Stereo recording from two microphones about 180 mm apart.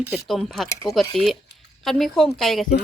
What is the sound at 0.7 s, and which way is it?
Speech, 20° left (ahead or behind).